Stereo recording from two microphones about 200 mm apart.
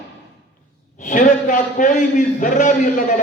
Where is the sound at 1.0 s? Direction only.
40° left (ahead or behind).